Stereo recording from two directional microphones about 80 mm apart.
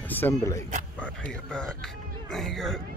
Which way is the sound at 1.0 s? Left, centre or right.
Centre.